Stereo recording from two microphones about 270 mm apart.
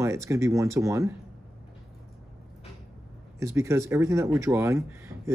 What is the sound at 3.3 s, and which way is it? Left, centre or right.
Speech, centre.